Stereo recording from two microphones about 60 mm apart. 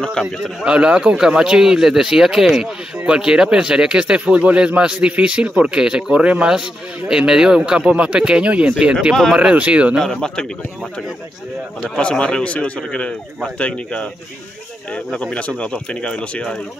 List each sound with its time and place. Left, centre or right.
0.7 s speech: centre
9.9 s speech: centre
12.0 s a man's voice: centre
15.0 s speech: centre